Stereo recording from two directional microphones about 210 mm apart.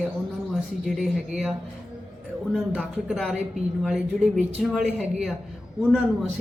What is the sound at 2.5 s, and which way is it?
A man's voice, centre (ahead or behind).